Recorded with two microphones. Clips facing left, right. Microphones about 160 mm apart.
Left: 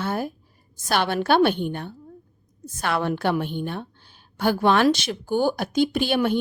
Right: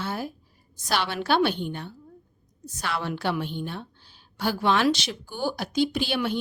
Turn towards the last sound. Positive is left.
turn(degrees=50)  # may be behind; listen again after turning